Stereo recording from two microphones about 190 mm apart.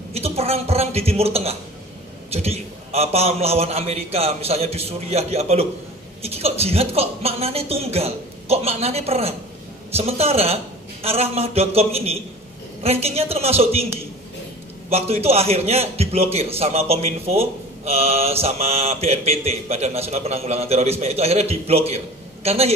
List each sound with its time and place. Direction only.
0.1 s a man's voice: 30° right (ahead or behind)
14.9 s a man's voice: 35° right (ahead or behind)